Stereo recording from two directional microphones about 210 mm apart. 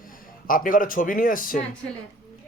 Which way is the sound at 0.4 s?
40° left (ahead or behind).